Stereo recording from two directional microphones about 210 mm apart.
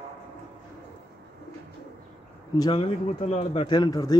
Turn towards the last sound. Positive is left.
turn(degrees=20)  # may be behind; listen again after turning